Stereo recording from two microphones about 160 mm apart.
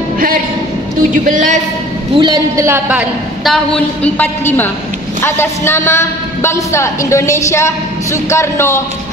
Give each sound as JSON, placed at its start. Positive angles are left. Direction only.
{"t": 1.1, "sound": "speech", "side_deg": -55}
{"t": 2.1, "sound": "a man's voice", "side_deg": -25}
{"t": 3.4, "sound": "a woman's voice", "side_deg": 5}